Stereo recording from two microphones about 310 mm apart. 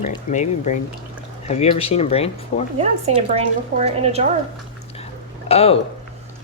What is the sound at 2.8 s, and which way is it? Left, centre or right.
Speech, right.